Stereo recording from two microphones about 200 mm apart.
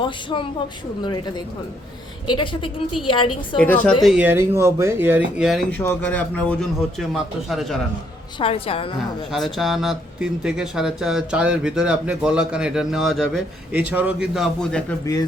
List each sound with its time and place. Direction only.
0.0 s a woman's voice: 25° left (ahead or behind)
2.2 s a woman's voice: 25° left (ahead or behind)
3.6 s a woman's voice: 5° left (ahead or behind)
4.0 s speech: 5° right (ahead or behind)
8.4 s a woman's voice: 25° left (ahead or behind)
9.3 s speech: centre (ahead or behind)